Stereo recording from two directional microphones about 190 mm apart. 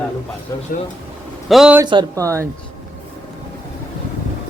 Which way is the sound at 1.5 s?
5° right (ahead or behind).